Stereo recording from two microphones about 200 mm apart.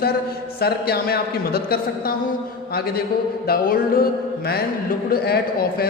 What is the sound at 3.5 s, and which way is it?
Speech, 45° left (ahead or behind).